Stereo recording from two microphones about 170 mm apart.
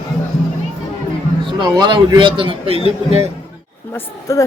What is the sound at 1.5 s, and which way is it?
A man's voice, 25° right (ahead or behind).